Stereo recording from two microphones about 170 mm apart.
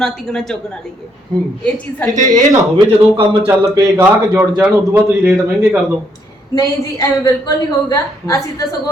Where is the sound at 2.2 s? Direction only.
20° right (ahead or behind).